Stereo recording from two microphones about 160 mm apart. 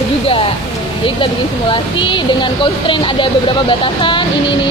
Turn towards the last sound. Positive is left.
turn(degrees=30)  # may be behind; listen again after turning